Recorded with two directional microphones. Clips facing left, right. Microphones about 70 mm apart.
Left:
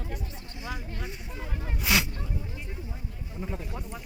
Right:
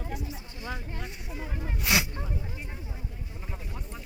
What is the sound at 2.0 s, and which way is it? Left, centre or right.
Speech, right.